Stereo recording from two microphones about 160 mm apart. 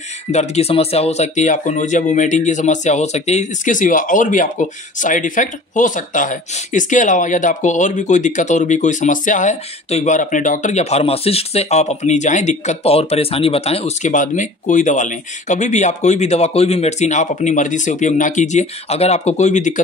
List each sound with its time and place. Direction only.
0.3 s speech: 40° left (ahead or behind)